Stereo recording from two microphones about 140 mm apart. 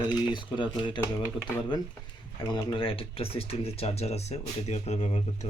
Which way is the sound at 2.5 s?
30° left (ahead or behind).